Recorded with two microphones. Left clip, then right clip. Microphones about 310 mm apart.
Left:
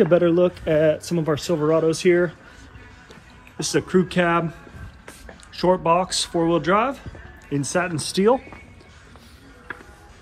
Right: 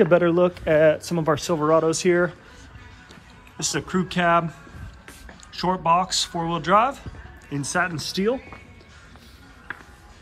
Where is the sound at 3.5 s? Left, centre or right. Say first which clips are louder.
Left 5 dB; centre.